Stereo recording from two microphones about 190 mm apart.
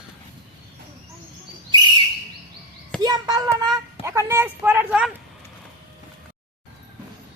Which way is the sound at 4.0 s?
15° right (ahead or behind).